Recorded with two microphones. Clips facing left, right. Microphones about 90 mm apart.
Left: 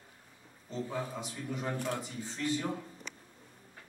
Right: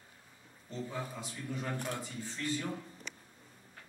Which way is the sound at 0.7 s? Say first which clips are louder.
Left 3 dB; 20° left (ahead or behind).